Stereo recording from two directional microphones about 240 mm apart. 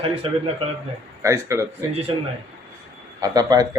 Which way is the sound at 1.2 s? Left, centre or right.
Centre.